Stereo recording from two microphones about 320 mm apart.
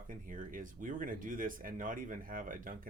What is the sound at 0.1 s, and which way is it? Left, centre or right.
Speech, right.